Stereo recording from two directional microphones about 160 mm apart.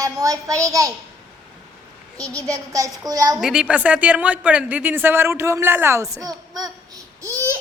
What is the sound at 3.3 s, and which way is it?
A woman's voice, 5° right (ahead or behind).